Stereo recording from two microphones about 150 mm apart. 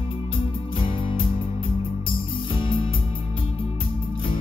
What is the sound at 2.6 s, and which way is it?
Music, 35° left (ahead or behind).